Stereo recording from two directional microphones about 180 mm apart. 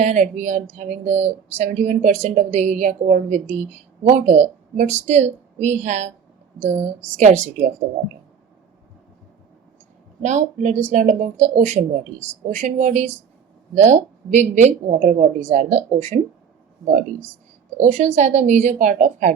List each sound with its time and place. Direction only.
0.0 s speech: 45° right (ahead or behind)
10.2 s a woman's voice: 40° right (ahead or behind)
17.7 s a woman's voice: 40° right (ahead or behind)